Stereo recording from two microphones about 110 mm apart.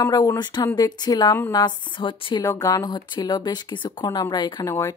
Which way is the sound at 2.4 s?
30° left (ahead or behind).